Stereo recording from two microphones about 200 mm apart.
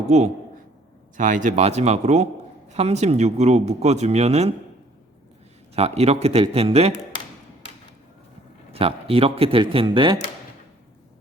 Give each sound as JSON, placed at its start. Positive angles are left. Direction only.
{"t": 1.1, "sound": "speech", "side_deg": -40}
{"t": 5.7, "sound": "speech", "side_deg": -30}
{"t": 8.7, "sound": "speech", "side_deg": -30}